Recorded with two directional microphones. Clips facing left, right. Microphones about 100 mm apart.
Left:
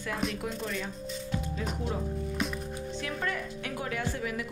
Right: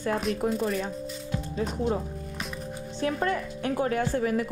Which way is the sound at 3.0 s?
35° right (ahead or behind).